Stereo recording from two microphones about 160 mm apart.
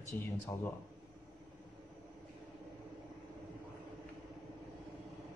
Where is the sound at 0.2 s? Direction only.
20° left (ahead or behind).